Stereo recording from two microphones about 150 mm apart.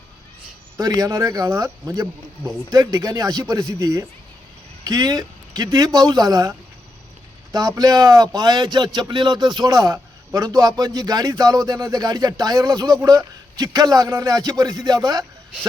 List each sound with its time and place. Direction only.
0.8 s speech: 25° right (ahead or behind)
7.8 s speech: 25° right (ahead or behind)